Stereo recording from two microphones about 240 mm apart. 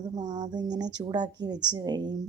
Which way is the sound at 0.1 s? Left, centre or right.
Centre.